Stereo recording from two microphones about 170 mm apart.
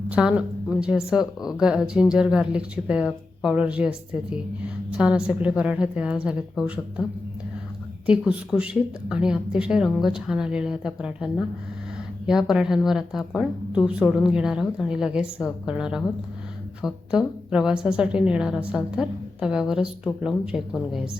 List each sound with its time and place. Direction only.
0.1 s a woman's voice: 5° right (ahead or behind)
8.0 s a woman's voice: 5° right (ahead or behind)